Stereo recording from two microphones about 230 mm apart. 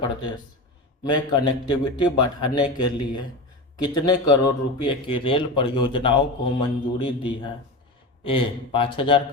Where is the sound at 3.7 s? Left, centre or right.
Centre.